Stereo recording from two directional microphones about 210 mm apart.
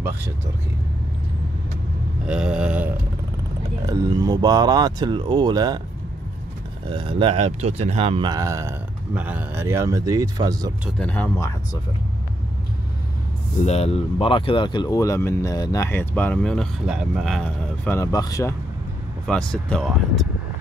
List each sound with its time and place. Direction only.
2.2 s speech: 5° right (ahead or behind)
3.8 s speech: 15° right (ahead or behind)
6.9 s speech: 25° right (ahead or behind)
11.0 s speech: 10° left (ahead or behind)
13.6 s speech: 30° left (ahead or behind)
19.2 s speech: 5° left (ahead or behind)